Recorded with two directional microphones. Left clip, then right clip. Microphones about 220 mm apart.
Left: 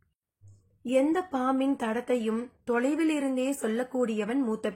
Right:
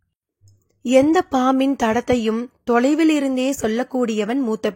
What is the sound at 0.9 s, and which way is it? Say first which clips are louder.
Speech: right 11 dB; 40° right (ahead or behind).